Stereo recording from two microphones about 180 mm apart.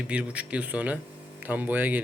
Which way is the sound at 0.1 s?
5° right (ahead or behind).